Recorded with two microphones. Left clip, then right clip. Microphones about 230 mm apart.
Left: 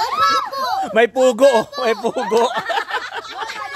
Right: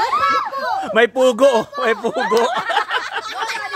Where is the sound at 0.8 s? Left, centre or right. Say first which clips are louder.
Even; centre.